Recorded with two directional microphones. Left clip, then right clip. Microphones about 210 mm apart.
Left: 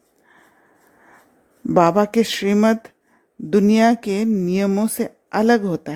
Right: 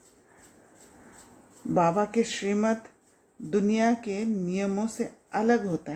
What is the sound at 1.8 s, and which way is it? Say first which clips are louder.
Speech: left 9 dB; 50° left (ahead or behind).